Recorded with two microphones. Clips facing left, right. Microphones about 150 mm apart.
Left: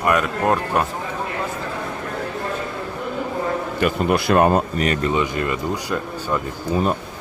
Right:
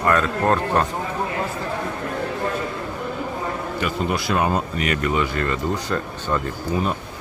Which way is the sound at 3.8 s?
55° left (ahead or behind).